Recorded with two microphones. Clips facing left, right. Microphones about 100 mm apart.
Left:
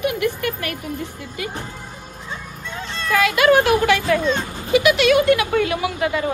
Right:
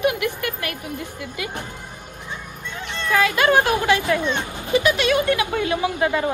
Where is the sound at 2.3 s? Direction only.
15° right (ahead or behind).